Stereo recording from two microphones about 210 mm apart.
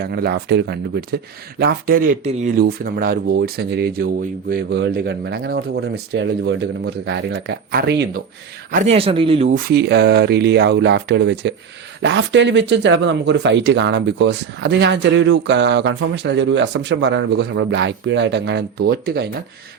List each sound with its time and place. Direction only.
0.0 s speech: 50° right (ahead or behind)
8.7 s speech: 30° right (ahead or behind)
9.5 s speech: 45° right (ahead or behind)